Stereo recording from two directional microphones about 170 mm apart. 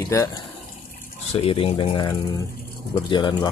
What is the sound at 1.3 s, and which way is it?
Speech, 35° left (ahead or behind).